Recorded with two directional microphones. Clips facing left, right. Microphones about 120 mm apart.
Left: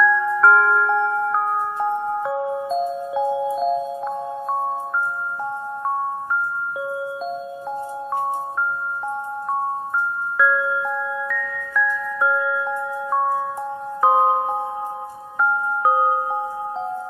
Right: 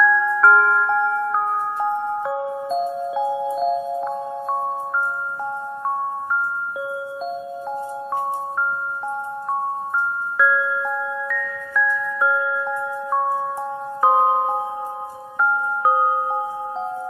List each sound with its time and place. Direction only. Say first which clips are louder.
0.0 s glockenspiel: even; centre (ahead or behind)
1.3 s music: even; centre (ahead or behind)
10.3 s glockenspiel: even; centre (ahead or behind)
14.0 s glockenspiel: even; centre (ahead or behind)